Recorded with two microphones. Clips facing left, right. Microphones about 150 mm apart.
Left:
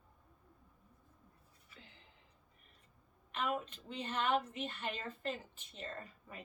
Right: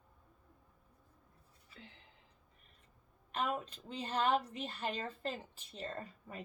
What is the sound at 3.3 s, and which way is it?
A woman's voice, 35° right (ahead or behind).